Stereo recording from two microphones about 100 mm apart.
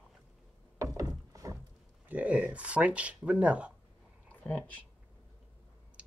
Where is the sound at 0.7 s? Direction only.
30° right (ahead or behind).